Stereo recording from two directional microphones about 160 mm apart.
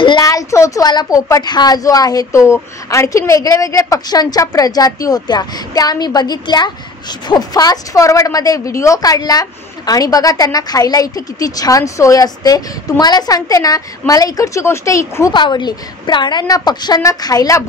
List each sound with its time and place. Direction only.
0.0 s a woman's voice: 25° left (ahead or behind)